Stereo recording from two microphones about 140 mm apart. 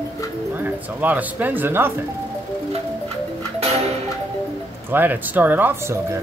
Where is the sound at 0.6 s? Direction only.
10° right (ahead or behind).